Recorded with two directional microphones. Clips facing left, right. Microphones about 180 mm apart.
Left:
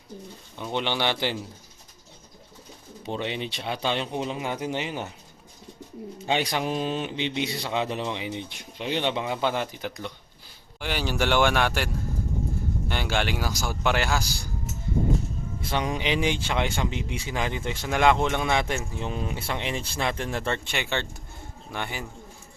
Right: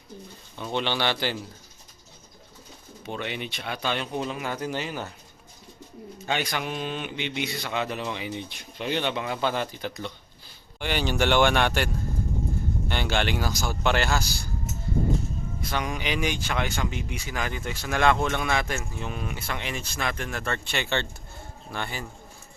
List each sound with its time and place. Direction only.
0.5 s speech: 15° left (ahead or behind)
3.1 s speech: 30° left (ahead or behind)
6.2 s speech: 30° left (ahead or behind)
10.8 s speech: 5° left (ahead or behind)
12.9 s speech: 5° left (ahead or behind)
15.7 s speech: 25° left (ahead or behind)
20.7 s speech: 15° left (ahead or behind)